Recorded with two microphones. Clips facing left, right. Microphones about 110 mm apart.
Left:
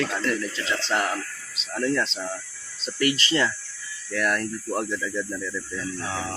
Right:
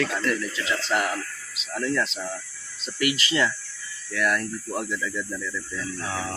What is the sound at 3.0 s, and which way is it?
Speech, 35° left (ahead or behind).